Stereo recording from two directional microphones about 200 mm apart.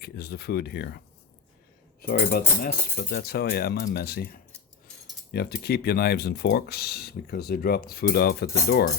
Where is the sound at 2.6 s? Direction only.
50° left (ahead or behind).